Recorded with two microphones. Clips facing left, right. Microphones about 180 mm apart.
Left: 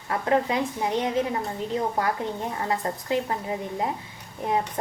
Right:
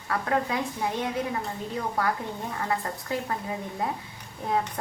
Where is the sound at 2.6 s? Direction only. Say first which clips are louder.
Left 3 dB; 20° left (ahead or behind).